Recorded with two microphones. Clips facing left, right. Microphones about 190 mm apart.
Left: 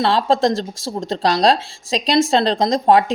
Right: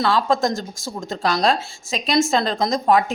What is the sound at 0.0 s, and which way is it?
Speech, 30° left (ahead or behind).